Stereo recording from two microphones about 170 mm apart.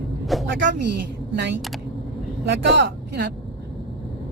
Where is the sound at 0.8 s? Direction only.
90° right.